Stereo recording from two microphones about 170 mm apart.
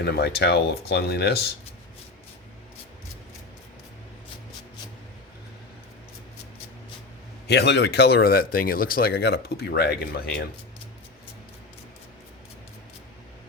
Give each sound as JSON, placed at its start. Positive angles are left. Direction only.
{"t": 0.0, "sound": "speech", "side_deg": 75}
{"t": 7.4, "sound": "speech", "side_deg": 80}